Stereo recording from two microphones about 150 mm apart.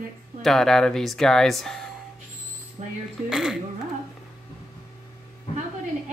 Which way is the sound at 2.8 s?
50° right (ahead or behind).